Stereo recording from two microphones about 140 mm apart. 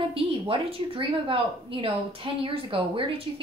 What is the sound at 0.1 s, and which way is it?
A woman's voice, 40° right (ahead or behind).